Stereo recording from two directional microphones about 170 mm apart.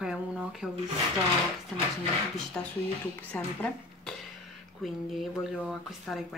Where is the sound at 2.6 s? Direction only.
10° left (ahead or behind).